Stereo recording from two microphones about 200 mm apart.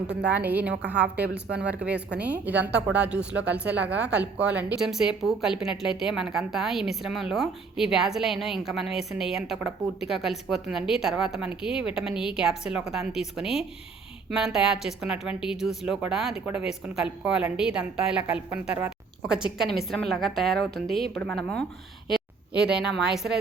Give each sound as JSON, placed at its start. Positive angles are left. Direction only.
{"t": 0.1, "sound": "speech", "side_deg": -60}
{"t": 0.3, "sound": "a woman's voice", "side_deg": -10}
{"t": 1.2, "sound": "speech", "side_deg": -55}
{"t": 2.1, "sound": "a woman's voice", "side_deg": -5}
{"t": 22.7, "sound": "a woman's voice", "side_deg": -5}